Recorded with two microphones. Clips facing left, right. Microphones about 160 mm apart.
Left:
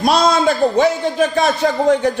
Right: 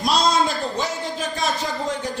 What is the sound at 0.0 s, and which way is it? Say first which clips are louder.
A man's voice: left 6 dB; 60° left (ahead or behind).